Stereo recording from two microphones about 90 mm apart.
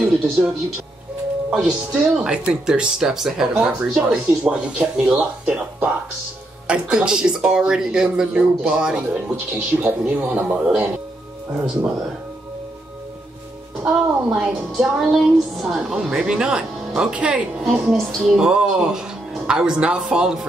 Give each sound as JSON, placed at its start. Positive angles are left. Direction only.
{"t": 0.0, "sound": "a woman's voice", "side_deg": -10}
{"t": 13.8, "sound": "a woman's voice", "side_deg": -5}